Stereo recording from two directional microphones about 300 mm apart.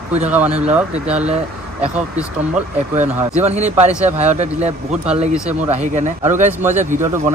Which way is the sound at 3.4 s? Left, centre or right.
Right.